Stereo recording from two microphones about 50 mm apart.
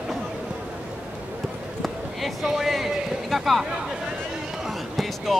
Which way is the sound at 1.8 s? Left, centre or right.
Centre.